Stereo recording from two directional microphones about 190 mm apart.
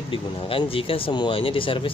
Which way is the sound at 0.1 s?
30° left (ahead or behind).